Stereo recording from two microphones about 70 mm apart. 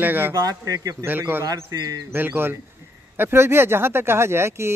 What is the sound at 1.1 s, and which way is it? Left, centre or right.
Speech, right.